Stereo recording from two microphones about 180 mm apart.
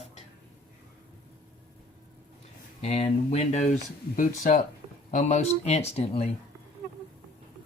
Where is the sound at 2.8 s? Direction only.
35° left (ahead or behind).